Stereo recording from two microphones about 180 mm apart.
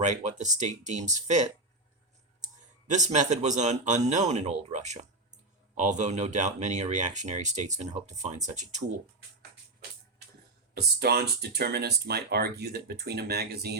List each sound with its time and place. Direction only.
0.0 s speech: 40° right (ahead or behind)
2.9 s speech: 40° right (ahead or behind)
10.8 s speech: 60° right (ahead or behind)